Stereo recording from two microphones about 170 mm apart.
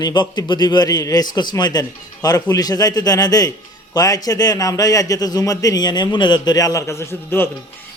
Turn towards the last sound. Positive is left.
turn(degrees=15)  # may be behind; listen again after turning